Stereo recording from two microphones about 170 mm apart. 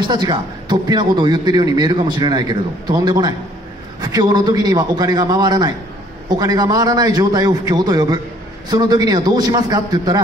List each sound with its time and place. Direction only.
0.0 s a man's voice: 25° right (ahead or behind)